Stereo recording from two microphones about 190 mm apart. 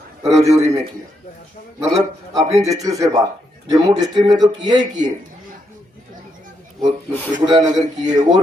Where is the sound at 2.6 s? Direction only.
20° right (ahead or behind).